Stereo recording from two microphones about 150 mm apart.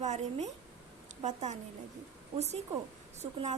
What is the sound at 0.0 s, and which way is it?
A woman's voice, 50° right (ahead or behind).